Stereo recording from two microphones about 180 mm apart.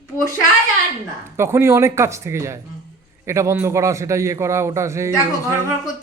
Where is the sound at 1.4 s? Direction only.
15° right (ahead or behind).